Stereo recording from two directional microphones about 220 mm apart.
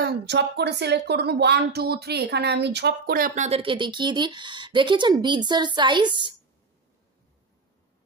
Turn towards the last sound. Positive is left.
turn(degrees=-20)  # may be behind; listen again after turning